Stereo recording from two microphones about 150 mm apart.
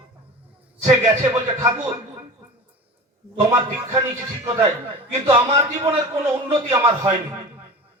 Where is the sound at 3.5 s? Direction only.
20° right (ahead or behind).